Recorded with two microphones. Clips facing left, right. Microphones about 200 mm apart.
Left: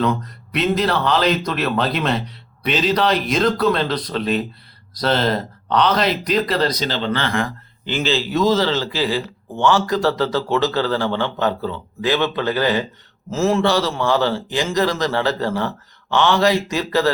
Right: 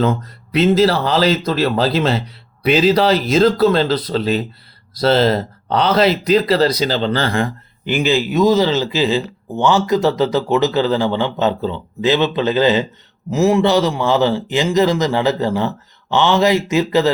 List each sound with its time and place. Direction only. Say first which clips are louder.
0.0 s speech: right 3 dB; 30° right (ahead or behind)
2.6 s speech: right 7 dB; 5° right (ahead or behind)
2.9 s speech: right 4 dB; 30° right (ahead or behind)
7.9 s speech: right 4 dB; 15° right (ahead or behind)